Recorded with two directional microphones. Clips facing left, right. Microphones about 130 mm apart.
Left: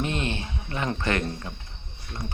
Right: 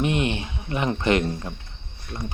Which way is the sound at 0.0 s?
15° right (ahead or behind).